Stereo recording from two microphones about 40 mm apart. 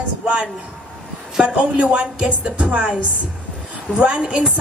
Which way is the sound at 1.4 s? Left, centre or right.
Right.